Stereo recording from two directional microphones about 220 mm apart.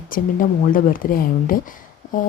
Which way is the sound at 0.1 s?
40° left (ahead or behind).